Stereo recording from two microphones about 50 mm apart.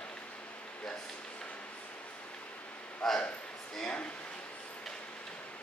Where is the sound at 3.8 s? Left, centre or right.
Left.